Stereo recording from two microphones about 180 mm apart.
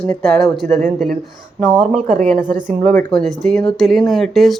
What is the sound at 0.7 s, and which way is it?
Speech, 40° right (ahead or behind).